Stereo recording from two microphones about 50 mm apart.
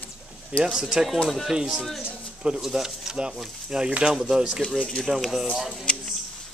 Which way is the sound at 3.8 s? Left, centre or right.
Centre.